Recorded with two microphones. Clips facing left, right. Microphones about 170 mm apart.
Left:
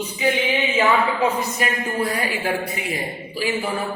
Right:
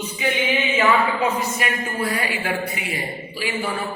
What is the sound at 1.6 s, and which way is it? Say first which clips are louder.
Speech: left 2 dB; 40° left (ahead or behind).